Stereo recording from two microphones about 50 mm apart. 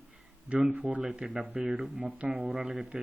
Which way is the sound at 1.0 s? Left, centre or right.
Centre.